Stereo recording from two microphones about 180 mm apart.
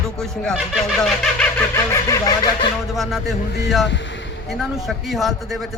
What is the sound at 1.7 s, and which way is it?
Snicker, 20° left (ahead or behind).